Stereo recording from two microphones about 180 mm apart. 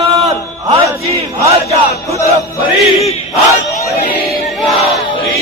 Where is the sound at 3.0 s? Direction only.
35° left (ahead or behind).